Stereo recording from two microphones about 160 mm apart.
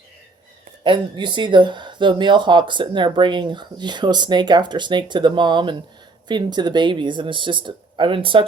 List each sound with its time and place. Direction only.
0.9 s speech: 30° right (ahead or behind)